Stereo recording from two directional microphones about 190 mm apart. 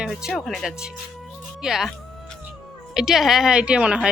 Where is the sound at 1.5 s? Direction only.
5° right (ahead or behind).